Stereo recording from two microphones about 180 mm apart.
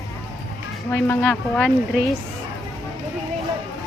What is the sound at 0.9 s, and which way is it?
Speech, 10° left (ahead or behind).